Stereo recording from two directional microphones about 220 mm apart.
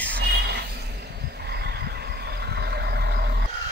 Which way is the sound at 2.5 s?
50° right (ahead or behind).